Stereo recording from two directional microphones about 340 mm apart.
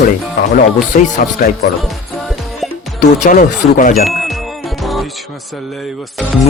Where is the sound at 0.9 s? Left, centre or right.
Left.